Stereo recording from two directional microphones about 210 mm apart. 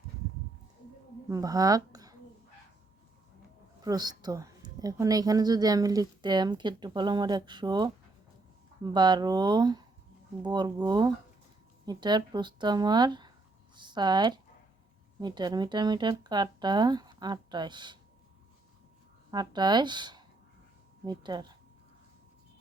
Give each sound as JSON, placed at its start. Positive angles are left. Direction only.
{"t": 1.3, "sound": "speech", "side_deg": -15}
{"t": 3.8, "sound": "a woman's voice", "side_deg": -20}
{"t": 19.3, "sound": "a woman's voice", "side_deg": -20}